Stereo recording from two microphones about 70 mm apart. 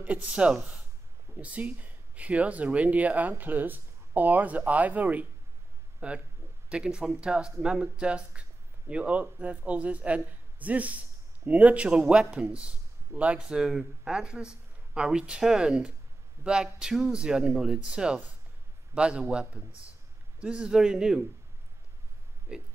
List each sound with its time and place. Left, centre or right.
0.0 s speech: centre
22.5 s speech: centre